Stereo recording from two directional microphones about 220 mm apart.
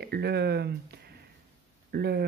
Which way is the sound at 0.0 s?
50° right (ahead or behind).